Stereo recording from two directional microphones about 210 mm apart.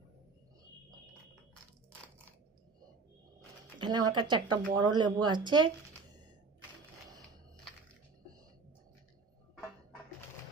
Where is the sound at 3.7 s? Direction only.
20° right (ahead or behind).